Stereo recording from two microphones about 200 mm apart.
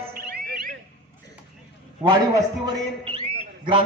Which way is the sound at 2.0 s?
25° right (ahead or behind).